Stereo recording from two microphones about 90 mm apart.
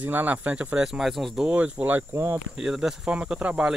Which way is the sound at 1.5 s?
15° right (ahead or behind).